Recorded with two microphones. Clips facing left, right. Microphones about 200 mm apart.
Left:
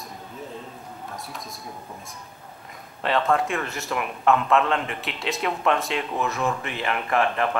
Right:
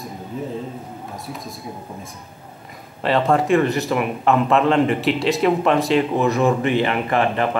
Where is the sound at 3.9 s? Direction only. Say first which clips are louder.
Right 3 dB; centre (ahead or behind).